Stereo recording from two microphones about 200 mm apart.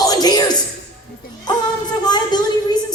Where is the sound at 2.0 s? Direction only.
20° left (ahead or behind).